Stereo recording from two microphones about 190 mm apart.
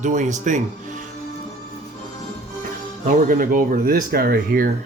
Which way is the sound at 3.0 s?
45° right (ahead or behind).